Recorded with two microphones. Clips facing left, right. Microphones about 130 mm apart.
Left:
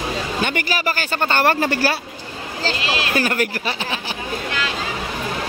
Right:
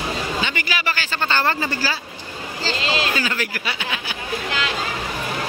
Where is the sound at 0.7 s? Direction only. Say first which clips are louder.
Left 3 dB; 40° left (ahead or behind).